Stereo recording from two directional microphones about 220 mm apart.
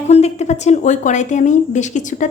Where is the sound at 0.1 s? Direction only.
30° left (ahead or behind).